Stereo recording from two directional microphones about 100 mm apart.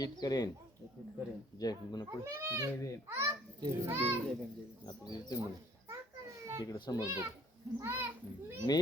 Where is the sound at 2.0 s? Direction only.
25° right (ahead or behind).